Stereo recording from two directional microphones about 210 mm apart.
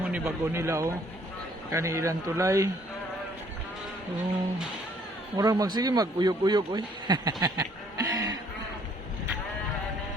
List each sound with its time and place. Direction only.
0.0 s speech: 10° right (ahead or behind)
5.4 s a man's voice: 15° right (ahead or behind)